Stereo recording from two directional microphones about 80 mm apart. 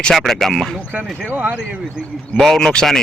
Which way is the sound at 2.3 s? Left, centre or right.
Centre.